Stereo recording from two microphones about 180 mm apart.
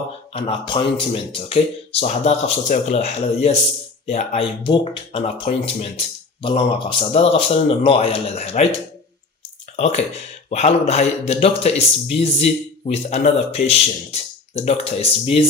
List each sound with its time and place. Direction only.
0.3 s speech: 30° left (ahead or behind)
9.7 s speech: 35° left (ahead or behind)